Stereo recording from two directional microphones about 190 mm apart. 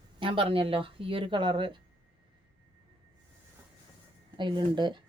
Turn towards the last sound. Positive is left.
turn(degrees=-25)  # may be behind; listen again after turning